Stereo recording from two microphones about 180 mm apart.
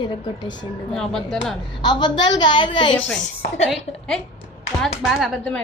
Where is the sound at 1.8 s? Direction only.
25° left (ahead or behind).